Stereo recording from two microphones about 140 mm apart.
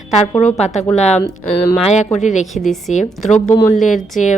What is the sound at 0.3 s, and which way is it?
Speech, 50° left (ahead or behind).